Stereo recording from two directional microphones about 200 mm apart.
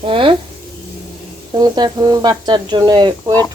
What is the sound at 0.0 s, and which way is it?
Speech, 25° right (ahead or behind).